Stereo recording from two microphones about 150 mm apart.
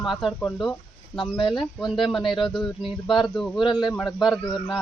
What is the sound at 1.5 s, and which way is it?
Speech, centre (ahead or behind).